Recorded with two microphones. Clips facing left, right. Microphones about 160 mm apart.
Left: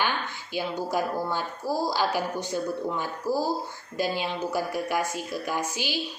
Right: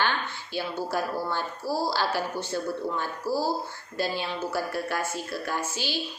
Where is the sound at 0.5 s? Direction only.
15° left (ahead or behind).